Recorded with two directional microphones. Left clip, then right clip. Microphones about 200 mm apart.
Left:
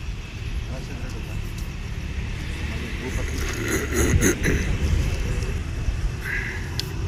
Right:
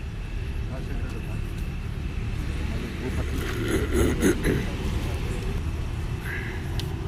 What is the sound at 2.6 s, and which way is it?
Vehicle, 60° right (ahead or behind).